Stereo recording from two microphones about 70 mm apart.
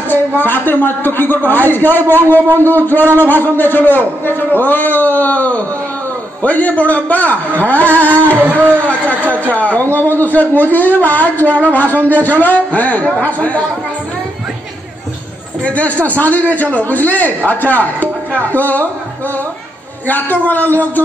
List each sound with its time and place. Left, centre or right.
0.1 s a man's voice: left
15.6 s a man's voice: left
20.1 s a man's voice: left